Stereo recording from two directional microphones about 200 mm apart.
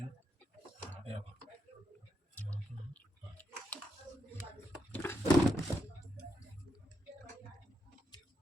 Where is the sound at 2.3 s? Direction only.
5° left (ahead or behind).